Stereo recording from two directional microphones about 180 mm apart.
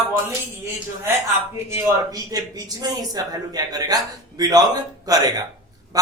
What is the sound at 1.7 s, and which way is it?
A man's voice, 20° right (ahead or behind).